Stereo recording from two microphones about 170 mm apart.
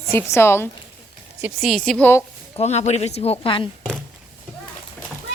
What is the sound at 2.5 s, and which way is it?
A woman's voice, 40° left (ahead or behind).